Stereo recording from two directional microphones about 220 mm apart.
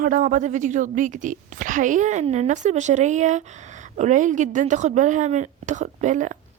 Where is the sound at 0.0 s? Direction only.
35° right (ahead or behind).